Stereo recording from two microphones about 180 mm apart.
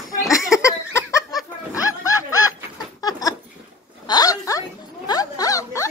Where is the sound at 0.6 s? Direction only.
15° left (ahead or behind).